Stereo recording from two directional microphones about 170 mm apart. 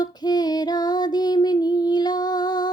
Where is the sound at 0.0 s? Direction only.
25° left (ahead or behind).